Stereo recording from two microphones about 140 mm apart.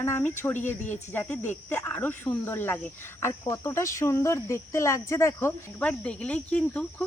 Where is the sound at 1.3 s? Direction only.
15° left (ahead or behind).